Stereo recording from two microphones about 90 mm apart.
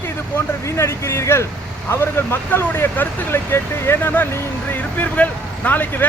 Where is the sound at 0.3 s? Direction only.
30° left (ahead or behind).